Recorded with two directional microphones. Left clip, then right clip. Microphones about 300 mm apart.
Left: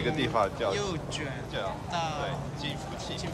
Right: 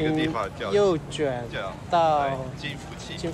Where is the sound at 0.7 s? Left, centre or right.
Centre.